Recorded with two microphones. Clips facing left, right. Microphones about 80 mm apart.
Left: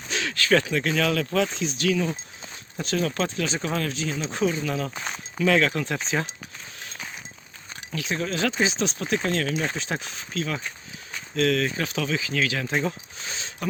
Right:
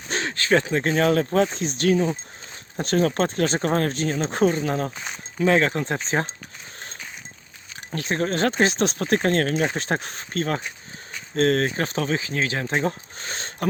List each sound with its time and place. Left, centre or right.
0.1 s speech: right
7.9 s speech: right